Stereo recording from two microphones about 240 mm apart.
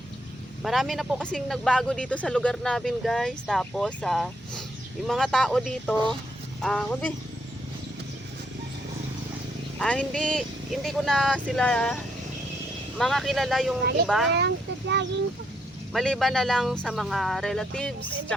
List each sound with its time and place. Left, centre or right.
0.6 s speech: centre
9.7 s speech: centre
13.0 s speech: centre
14.3 s speech: right
15.9 s speech: centre